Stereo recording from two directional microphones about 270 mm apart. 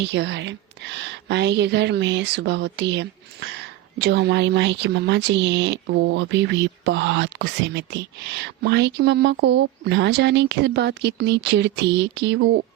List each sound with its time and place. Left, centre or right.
0.0 s a woman's voice: right